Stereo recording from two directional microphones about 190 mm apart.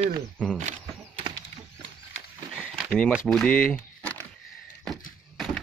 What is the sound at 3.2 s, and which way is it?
Speech, 5° left (ahead or behind).